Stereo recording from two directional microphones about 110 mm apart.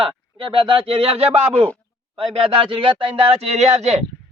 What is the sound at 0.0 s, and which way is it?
Speech, 55° right (ahead or behind).